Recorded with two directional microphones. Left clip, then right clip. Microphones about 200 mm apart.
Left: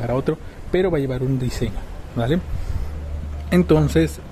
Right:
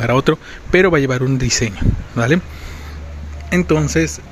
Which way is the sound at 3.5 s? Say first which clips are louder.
Right 1 dB; centre (ahead or behind).